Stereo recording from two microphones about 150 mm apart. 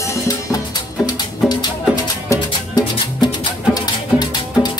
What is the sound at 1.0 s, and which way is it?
Music, 30° left (ahead or behind).